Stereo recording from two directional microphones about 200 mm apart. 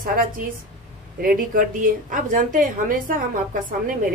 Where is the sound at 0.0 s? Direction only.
45° right (ahead or behind).